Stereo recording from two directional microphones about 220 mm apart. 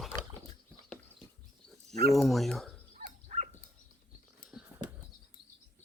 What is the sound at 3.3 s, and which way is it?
Dog, 40° right (ahead or behind).